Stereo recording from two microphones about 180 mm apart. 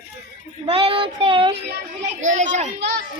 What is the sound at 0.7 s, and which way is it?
Child singing, 30° right (ahead or behind).